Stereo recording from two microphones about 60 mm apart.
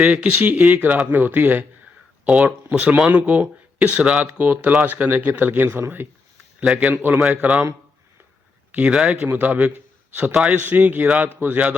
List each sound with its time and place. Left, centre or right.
0.0 s speech: right
2.2 s speech: right
6.6 s speech: right
6.9 s speech: right
7.2 s a man's voice: centre
8.7 s speech: centre
9.2 s speech: right
9.7 s a sound: right
10.4 s speech: right